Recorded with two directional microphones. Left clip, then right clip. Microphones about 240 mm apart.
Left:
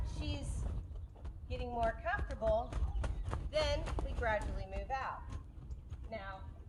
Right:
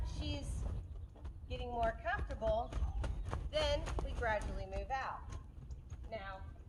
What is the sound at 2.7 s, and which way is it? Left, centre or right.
Horse, centre.